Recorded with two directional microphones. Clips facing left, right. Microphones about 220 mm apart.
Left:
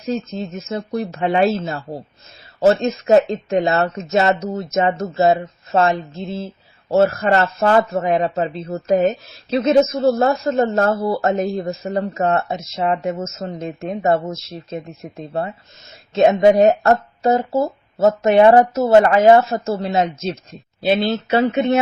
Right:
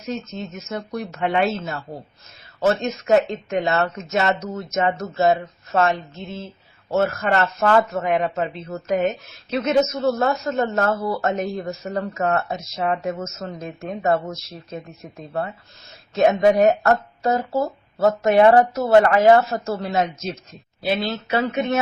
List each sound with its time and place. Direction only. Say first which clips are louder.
0.1 s speech: left 5 dB; 30° left (ahead or behind)